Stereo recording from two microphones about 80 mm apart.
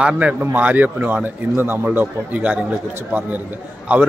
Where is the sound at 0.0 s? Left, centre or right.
Centre.